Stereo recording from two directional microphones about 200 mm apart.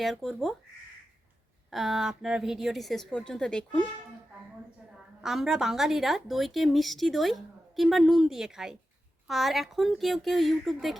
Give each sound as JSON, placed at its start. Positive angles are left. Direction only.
{"t": 0.0, "sound": "a woman's voice", "side_deg": 0}
{"t": 1.7, "sound": "a woman's voice", "side_deg": 0}
{"t": 5.2, "sound": "a woman's voice", "side_deg": 0}